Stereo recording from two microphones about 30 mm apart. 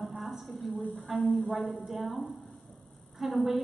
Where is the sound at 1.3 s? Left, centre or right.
Right.